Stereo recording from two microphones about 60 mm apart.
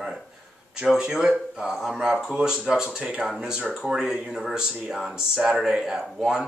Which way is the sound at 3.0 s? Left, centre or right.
Right.